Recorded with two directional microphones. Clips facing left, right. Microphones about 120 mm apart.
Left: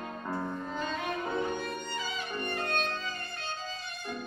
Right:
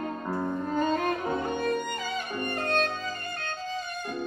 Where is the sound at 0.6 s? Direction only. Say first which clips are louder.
Right 8 dB; 50° right (ahead or behind).